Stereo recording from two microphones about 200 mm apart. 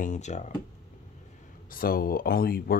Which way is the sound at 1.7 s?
45° left (ahead or behind).